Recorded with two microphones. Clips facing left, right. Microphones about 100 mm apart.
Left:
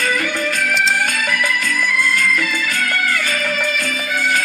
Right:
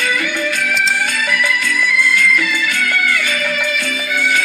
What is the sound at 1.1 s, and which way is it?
Music, 45° left (ahead or behind).